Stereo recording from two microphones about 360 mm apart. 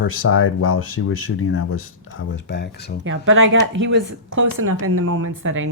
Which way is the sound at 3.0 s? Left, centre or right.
Right.